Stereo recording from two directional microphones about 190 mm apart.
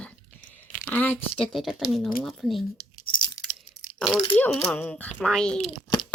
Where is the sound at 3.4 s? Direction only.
15° left (ahead or behind).